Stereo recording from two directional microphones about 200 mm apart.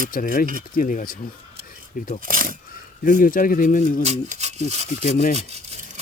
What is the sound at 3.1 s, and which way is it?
Speech, 45° left (ahead or behind).